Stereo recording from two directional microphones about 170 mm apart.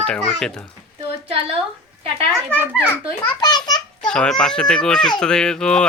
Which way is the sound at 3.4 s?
25° left (ahead or behind).